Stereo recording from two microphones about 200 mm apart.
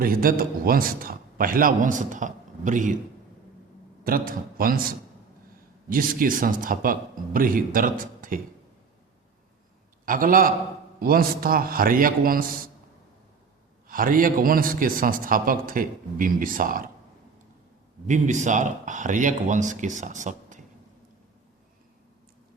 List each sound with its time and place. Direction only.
0.0 s a man's voice: 45° right (ahead or behind)
4.0 s a man's voice: 45° right (ahead or behind)
10.1 s a man's voice: 45° right (ahead or behind)
13.8 s a man's voice: 45° right (ahead or behind)
18.0 s speech: 35° right (ahead or behind)